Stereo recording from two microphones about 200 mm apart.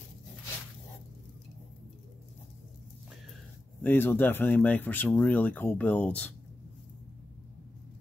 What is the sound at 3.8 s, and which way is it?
Speech, 10° left (ahead or behind).